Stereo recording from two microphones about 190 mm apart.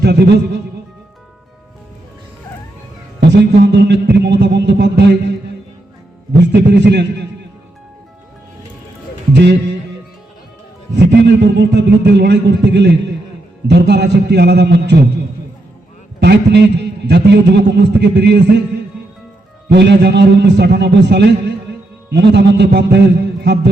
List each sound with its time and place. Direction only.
0.0 s a man's voice: 60° right (ahead or behind)
3.2 s a man's voice: 65° right (ahead or behind)
6.4 s a man's voice: 65° right (ahead or behind)
9.3 s a man's voice: 65° right (ahead or behind)
10.9 s a man's voice: 65° right (ahead or behind)
16.2 s a man's voice: 60° right (ahead or behind)
19.7 s a man's voice: 65° right (ahead or behind)